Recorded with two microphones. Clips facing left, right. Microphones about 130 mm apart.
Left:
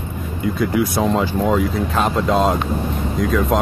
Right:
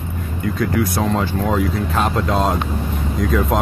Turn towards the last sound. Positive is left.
turn(degrees=0)  # may be behind; listen again after turning